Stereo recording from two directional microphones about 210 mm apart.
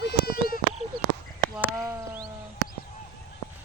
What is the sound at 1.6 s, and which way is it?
Speech, 15° right (ahead or behind).